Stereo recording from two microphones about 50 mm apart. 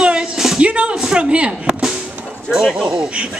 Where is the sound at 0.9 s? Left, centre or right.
Centre.